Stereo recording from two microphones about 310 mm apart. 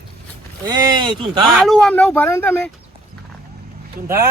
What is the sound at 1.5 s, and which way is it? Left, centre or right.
Speech, centre.